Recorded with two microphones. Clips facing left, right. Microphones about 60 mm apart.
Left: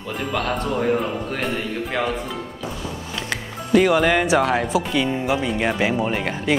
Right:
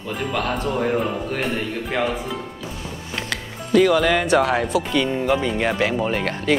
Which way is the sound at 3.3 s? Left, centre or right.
Centre.